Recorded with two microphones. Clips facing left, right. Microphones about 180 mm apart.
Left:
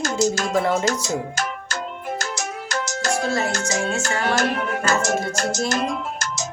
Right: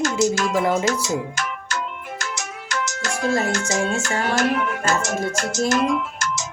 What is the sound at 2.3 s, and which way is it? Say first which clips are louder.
Music: left 2 dB; 35° left (ahead or behind).